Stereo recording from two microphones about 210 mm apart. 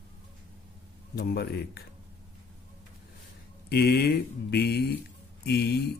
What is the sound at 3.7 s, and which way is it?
Speech, 50° left (ahead or behind).